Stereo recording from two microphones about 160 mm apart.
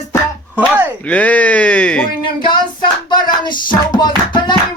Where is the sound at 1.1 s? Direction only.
10° left (ahead or behind).